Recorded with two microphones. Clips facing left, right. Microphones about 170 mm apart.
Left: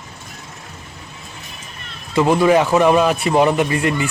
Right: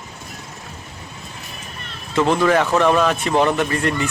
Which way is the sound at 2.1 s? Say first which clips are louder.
Left 3 dB; 10° left (ahead or behind).